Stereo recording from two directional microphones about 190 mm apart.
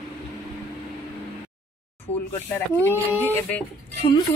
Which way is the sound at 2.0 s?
10° left (ahead or behind).